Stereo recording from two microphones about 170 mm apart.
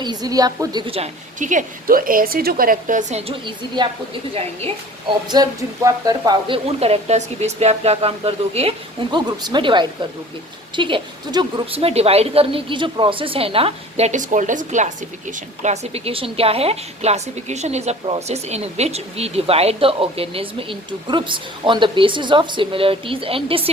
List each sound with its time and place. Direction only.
0.0 s a woman's voice: 25° right (ahead or behind)
5.3 s speech: 20° right (ahead or behind)
6.7 s a woman's voice: 35° right (ahead or behind)